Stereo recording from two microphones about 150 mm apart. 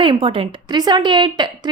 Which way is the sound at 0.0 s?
35° right (ahead or behind).